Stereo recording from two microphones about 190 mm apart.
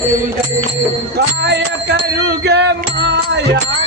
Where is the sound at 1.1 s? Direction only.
60° right (ahead or behind).